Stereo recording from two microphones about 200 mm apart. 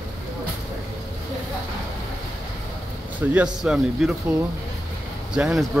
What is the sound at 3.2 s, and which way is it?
Speech, 5° right (ahead or behind).